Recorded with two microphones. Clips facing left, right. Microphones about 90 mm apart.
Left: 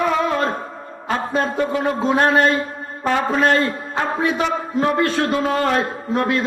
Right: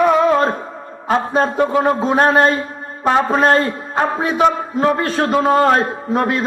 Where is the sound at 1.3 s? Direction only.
35° right (ahead or behind).